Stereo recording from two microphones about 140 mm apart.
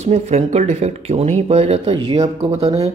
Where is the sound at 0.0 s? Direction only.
50° right (ahead or behind).